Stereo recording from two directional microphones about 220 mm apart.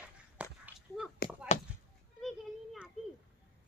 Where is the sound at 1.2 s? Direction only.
45° left (ahead or behind).